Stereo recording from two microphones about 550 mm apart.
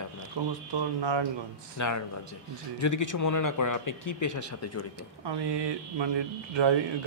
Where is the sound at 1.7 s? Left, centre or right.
Left.